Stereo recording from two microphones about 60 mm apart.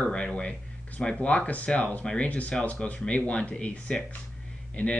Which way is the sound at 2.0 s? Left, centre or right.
Left.